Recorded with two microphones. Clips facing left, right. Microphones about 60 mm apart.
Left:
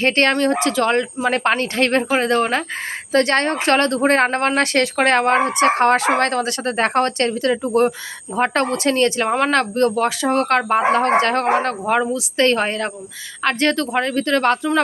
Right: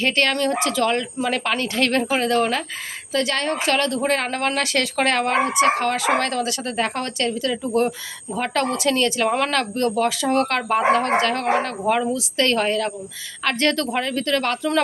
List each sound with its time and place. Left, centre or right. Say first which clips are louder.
0.0 s speech: left 4 dB; left
3.1 s speech: left 5 dB; left
7.5 s speech: left 4 dB; left
10.9 s speech: left 3 dB; left
11.9 s speech: right 1 dB; centre